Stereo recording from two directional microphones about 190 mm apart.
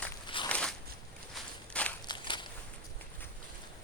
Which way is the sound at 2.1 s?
25° left (ahead or behind).